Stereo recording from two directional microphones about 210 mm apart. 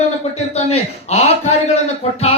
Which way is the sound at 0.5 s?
30° left (ahead or behind).